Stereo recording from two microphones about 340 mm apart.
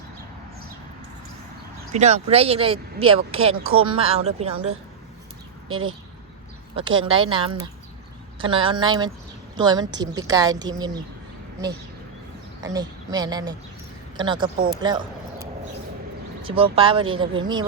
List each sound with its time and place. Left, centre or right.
1.9 s speech: centre
3.0 s speech: right
3.8 s speech: centre
5.6 s speech: centre
12.6 s speech: centre
14.8 s a sound: centre
16.4 s speech: centre